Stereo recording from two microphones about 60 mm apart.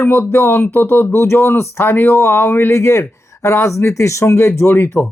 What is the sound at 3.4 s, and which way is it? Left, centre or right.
Speech, left.